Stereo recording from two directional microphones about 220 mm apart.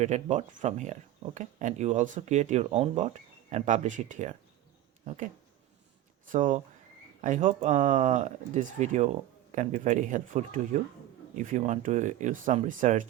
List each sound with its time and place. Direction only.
0.0 s speech: 30° right (ahead or behind)
6.3 s speech: 35° right (ahead or behind)